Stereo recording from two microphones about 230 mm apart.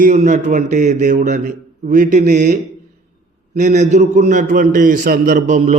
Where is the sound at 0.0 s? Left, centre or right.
Right.